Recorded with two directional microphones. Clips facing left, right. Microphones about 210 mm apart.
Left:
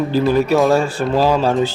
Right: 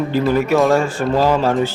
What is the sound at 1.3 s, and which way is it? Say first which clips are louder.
Speech: even; 15° left (ahead or behind).